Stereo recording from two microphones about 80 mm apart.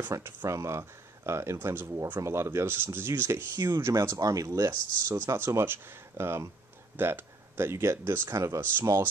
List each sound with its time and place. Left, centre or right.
0.1 s speech: right
8.3 s speech: right